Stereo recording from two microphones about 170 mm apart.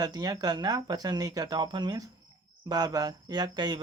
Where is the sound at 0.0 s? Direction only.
25° right (ahead or behind).